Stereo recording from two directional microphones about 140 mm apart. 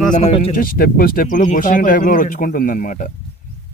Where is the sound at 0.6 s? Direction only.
90° left; by 3.1 s 70° left (ahead or behind).